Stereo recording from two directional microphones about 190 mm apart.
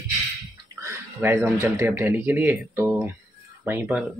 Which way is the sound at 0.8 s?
10° right (ahead or behind).